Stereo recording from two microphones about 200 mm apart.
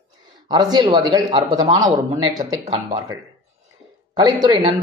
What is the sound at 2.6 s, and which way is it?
Speech, 30° right (ahead or behind).